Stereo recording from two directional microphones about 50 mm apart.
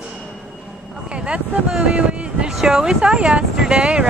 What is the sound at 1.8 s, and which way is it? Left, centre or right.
Speech, centre.